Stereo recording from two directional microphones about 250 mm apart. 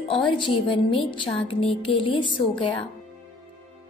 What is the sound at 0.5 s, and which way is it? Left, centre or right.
A woman's voice, left.